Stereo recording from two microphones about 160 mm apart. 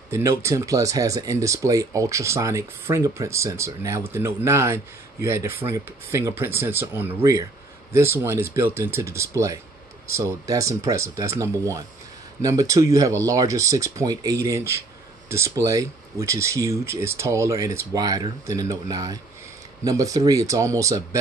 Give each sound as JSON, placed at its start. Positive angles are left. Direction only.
{"t": 0.1, "sound": "speech", "side_deg": -15}